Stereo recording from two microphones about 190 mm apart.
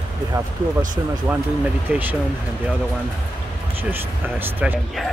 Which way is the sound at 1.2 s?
10° right (ahead or behind).